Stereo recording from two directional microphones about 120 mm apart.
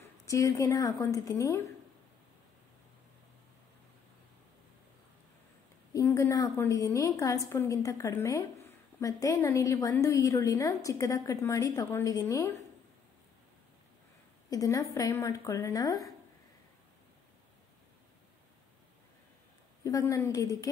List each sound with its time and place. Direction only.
0.3 s a woman's voice: 25° left (ahead or behind)
5.9 s a woman's voice: 25° left (ahead or behind)
14.5 s a woman's voice: 30° left (ahead or behind)
19.8 s a woman's voice: 25° left (ahead or behind)